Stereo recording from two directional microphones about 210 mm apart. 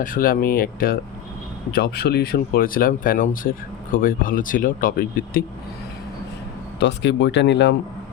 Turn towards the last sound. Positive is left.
turn(degrees=55)  # may be behind; listen again after turning